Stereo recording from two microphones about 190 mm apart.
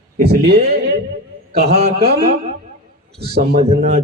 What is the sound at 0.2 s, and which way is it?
Speech, 55° right (ahead or behind).